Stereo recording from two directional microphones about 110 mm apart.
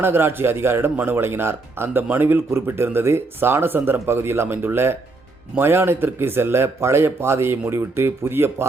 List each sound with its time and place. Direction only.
0.0 s speech: 20° right (ahead or behind)